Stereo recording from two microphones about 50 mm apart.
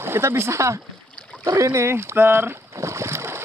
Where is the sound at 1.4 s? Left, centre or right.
Right.